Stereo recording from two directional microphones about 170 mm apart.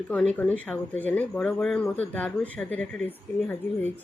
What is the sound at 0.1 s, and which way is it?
Speech, 5° left (ahead or behind).